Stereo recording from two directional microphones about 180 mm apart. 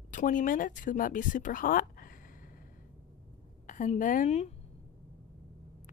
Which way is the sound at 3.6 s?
45° left (ahead or behind).